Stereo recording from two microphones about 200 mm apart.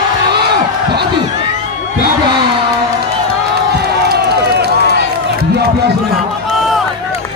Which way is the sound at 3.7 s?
55° right (ahead or behind).